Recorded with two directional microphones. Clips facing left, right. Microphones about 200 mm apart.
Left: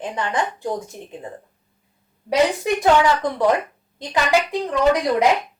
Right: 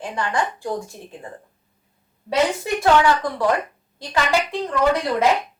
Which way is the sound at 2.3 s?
15° left (ahead or behind).